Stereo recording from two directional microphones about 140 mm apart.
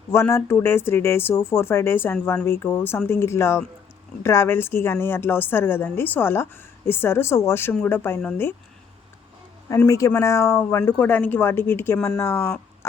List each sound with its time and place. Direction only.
0.1 s a woman's voice: 20° left (ahead or behind)
9.6 s a woman's voice: 25° left (ahead or behind)